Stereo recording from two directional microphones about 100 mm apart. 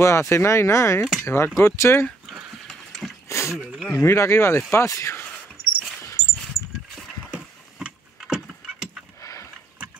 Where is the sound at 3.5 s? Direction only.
10° right (ahead or behind).